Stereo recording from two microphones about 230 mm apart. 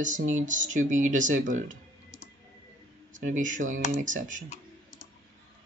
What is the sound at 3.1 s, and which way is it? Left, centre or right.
Speech, right.